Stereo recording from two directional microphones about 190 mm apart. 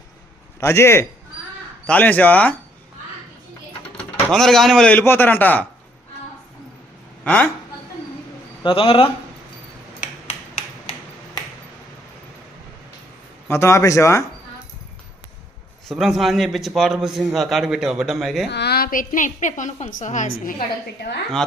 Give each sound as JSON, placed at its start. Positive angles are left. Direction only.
{"t": 0.6, "sound": "a man's voice", "side_deg": 15}
{"t": 4.3, "sound": "a man's voice", "side_deg": 0}
{"t": 8.6, "sound": "a man's voice", "side_deg": 30}
{"t": 10.0, "sound": "a sound", "side_deg": 35}
{"t": 13.5, "sound": "a man's voice", "side_deg": 15}
{"t": 15.9, "sound": "a man's voice", "side_deg": 0}
{"t": 18.5, "sound": "a woman's voice", "side_deg": 60}